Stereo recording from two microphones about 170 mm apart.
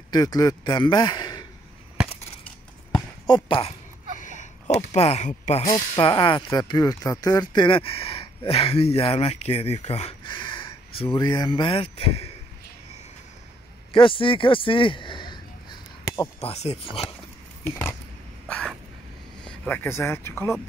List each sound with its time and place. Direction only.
0.1 s a man's voice: 25° left (ahead or behind)
3.3 s a man's voice: 30° left (ahead or behind)
4.2 s a sound: 45° left (ahead or behind)
5.9 s a man's voice: 30° left (ahead or behind)
13.9 s speech: 30° left (ahead or behind)
16.3 s speech: 40° left (ahead or behind)
17.6 s a sound: 10° left (ahead or behind)
19.4 s speech: 10° left (ahead or behind)